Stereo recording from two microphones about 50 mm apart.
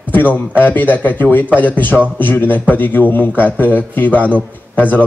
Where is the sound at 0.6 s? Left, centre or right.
Left.